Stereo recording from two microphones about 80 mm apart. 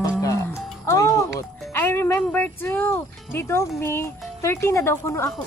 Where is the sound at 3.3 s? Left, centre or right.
Left.